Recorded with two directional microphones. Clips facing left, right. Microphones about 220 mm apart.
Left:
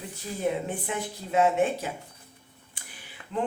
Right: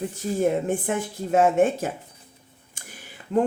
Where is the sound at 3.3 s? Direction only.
50° right (ahead or behind).